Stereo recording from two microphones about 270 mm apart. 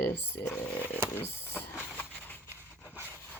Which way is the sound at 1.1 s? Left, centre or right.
Centre.